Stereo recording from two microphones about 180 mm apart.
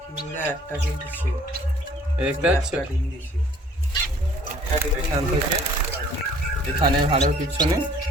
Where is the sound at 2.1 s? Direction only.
5° right (ahead or behind).